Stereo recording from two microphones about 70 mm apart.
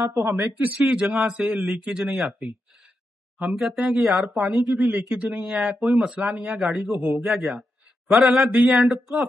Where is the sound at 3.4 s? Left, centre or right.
Centre.